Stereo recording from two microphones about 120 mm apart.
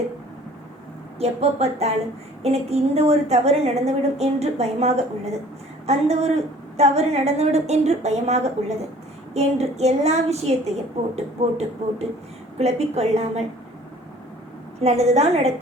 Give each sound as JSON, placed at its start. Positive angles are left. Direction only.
{"t": 1.2, "sound": "a woman's voice", "side_deg": -60}
{"t": 14.8, "sound": "a woman's voice", "side_deg": -65}